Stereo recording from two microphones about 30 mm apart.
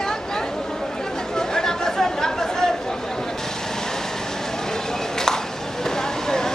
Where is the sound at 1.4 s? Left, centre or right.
Centre.